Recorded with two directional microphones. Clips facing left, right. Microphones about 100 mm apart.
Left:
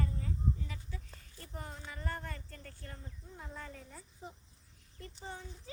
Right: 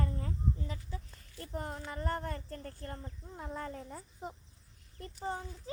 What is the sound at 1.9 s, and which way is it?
Speech, 45° right (ahead or behind).